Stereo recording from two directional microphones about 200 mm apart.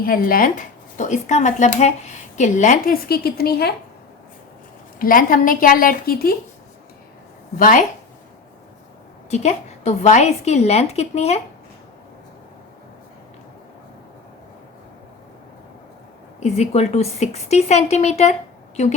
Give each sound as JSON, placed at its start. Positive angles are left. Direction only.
{"t": 0.0, "sound": "speech", "side_deg": 45}
{"t": 4.9, "sound": "a woman's voice", "side_deg": 45}
{"t": 7.5, "sound": "a woman's voice", "side_deg": 45}
{"t": 9.3, "sound": "speech", "side_deg": 35}
{"t": 16.4, "sound": "speech", "side_deg": 35}